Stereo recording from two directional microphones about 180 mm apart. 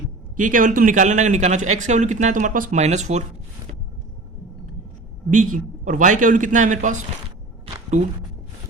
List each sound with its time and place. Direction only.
0.3 s a man's voice: 45° right (ahead or behind)
5.3 s a man's voice: 45° right (ahead or behind)
7.6 s a sound: 40° right (ahead or behind)